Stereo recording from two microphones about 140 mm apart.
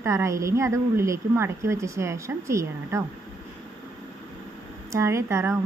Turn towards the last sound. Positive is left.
turn(degrees=-20)  # may be behind; listen again after turning